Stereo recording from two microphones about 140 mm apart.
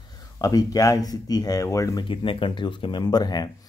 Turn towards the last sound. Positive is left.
turn(degrees=30)  # may be behind; listen again after turning